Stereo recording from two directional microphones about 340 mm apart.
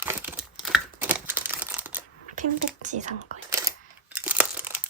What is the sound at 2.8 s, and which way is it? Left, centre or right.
Whispering, right.